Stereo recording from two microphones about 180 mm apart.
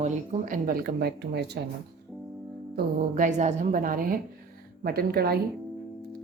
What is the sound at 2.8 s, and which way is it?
A woman's voice, 45° right (ahead or behind).